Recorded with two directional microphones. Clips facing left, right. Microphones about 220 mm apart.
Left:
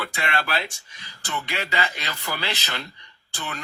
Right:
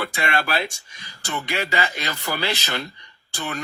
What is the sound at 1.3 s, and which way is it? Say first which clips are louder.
Speech: right 3 dB; 45° right (ahead or behind).